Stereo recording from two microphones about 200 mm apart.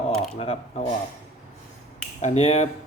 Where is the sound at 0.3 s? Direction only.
30° left (ahead or behind).